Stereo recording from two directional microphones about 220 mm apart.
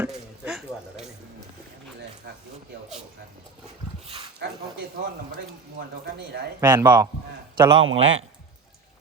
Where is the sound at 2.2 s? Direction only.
45° right (ahead or behind).